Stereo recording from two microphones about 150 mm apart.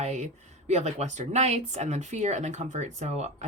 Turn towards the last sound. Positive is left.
turn(degrees=-50)  # may be behind; listen again after turning